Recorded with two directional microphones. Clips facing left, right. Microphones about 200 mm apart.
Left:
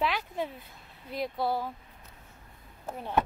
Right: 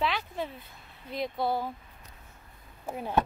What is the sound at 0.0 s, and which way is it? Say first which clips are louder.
A woman's voice: even; 10° left (ahead or behind).